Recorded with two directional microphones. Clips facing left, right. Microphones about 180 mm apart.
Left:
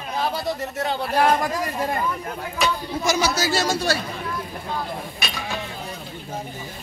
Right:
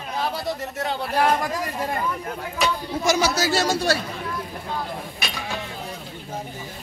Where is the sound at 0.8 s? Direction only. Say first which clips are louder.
Left 2 dB; 30° left (ahead or behind).